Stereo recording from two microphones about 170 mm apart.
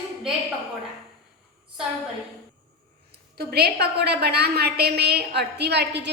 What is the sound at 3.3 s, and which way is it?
A woman's voice, 70° right (ahead or behind).